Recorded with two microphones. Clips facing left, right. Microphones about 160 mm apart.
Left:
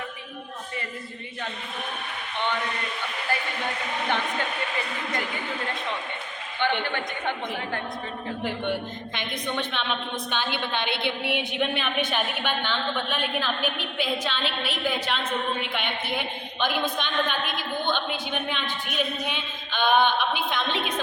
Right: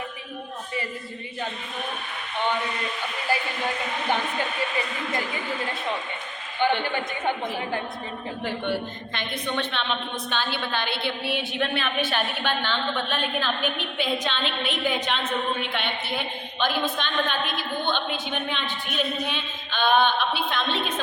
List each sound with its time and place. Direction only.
8.4 s a woman's voice: 15° left (ahead or behind)